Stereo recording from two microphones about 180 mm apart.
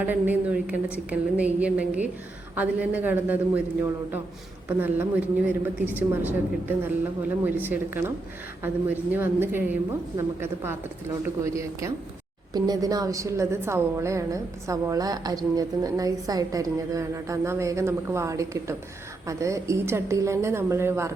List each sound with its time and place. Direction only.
0.0 s a woman's voice: 10° right (ahead or behind)
4.8 s a woman's voice: 10° right (ahead or behind)